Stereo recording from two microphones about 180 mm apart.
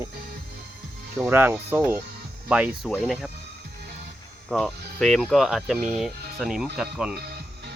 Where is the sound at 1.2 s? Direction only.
10° right (ahead or behind).